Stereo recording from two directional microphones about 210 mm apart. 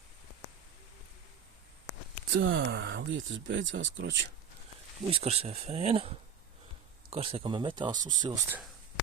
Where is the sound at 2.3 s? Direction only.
60° right (ahead or behind).